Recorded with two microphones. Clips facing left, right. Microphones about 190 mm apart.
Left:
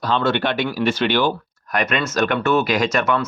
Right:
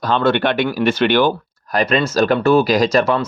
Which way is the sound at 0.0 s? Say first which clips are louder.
Right 4 dB; 50° right (ahead or behind).